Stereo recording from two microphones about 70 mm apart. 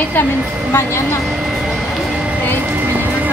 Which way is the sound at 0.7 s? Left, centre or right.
Left.